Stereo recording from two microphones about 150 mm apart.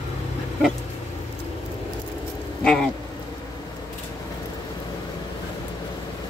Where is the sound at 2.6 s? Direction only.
5° left (ahead or behind).